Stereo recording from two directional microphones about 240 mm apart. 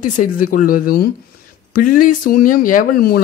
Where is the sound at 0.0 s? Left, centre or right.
Left.